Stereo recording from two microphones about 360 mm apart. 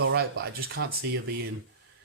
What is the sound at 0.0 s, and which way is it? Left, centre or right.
Speech, right.